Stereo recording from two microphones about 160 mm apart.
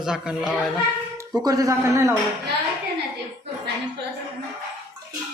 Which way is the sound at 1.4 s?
25° right (ahead or behind).